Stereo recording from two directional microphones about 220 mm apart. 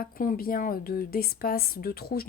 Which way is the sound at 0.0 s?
40° left (ahead or behind).